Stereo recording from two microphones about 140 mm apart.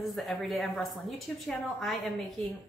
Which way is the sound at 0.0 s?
Centre (ahead or behind).